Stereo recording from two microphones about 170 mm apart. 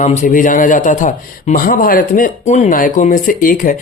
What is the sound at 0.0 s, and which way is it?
A man's voice, 45° left (ahead or behind).